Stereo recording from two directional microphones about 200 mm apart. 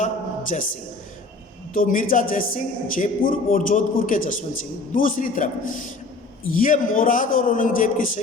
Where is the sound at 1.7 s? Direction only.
45° left (ahead or behind).